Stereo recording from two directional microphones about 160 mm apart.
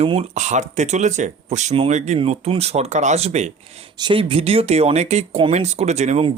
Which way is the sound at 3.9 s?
30° right (ahead or behind).